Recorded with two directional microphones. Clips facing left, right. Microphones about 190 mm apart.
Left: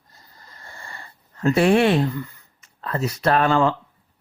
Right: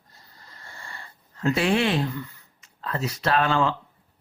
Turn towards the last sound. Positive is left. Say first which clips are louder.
# left 4 dB
turn(degrees=50)  # may be behind; listen again after turning